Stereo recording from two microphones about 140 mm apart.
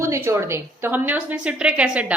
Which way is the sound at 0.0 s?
20° right (ahead or behind).